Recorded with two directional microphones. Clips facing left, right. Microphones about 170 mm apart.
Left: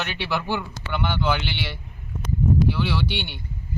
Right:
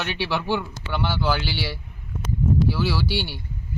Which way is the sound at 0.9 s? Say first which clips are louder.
Even; 5° right (ahead or behind).